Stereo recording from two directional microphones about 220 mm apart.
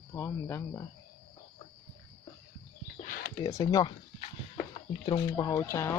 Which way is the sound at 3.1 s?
45° left (ahead or behind).